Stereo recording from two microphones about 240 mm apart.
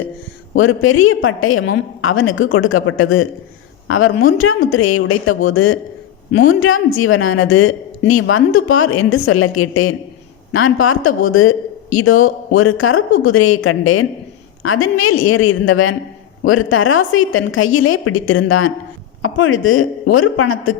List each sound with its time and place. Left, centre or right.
0.5 s a woman's voice: left